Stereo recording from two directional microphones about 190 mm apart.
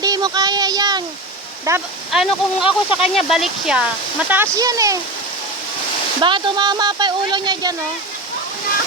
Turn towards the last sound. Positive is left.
turn(degrees=-25)  # may be behind; listen again after turning